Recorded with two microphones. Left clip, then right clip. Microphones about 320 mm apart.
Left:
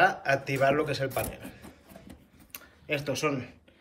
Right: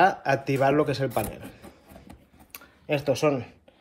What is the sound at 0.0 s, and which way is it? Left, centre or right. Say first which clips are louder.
A man's voice: right 3 dB; centre.